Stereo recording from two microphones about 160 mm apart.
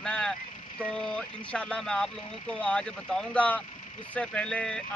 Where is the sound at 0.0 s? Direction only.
5° left (ahead or behind).